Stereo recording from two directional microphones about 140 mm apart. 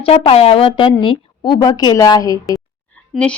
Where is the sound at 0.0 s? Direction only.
45° left (ahead or behind); by 2.6 s 25° left (ahead or behind).